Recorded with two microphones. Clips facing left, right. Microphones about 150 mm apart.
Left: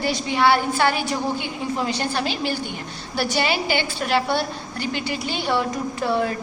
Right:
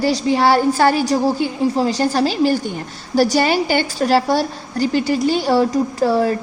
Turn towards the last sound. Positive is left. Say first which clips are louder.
# right 6 dB
turn(degrees=-35)  # may be behind; listen again after turning